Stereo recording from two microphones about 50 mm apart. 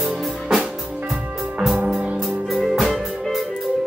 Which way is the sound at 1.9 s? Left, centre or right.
Right.